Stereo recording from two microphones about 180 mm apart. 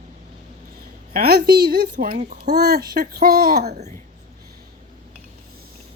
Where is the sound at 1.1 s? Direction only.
60° right (ahead or behind).